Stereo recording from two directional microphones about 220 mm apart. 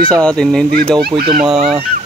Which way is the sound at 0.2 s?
5° left (ahead or behind).